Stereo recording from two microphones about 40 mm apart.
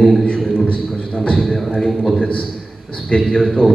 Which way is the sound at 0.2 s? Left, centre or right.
Left.